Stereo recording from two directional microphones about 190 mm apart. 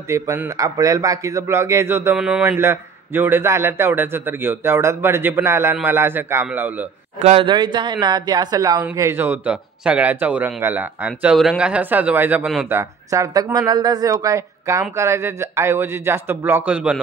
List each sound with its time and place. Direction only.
0.1 s speech: 15° right (ahead or behind)
7.2 s speech: 35° right (ahead or behind)
7.4 s speech: 25° right (ahead or behind); by 17.0 s 5° right (ahead or behind)